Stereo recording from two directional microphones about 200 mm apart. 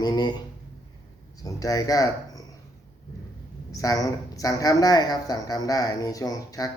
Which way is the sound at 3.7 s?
15° left (ahead or behind).